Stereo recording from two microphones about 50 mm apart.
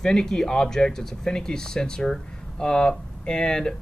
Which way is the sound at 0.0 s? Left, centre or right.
Centre.